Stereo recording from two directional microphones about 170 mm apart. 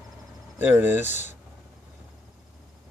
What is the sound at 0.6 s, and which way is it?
Speech, 10° right (ahead or behind).